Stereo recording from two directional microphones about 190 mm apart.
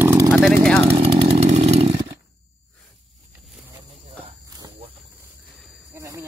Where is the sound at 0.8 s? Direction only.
30° right (ahead or behind).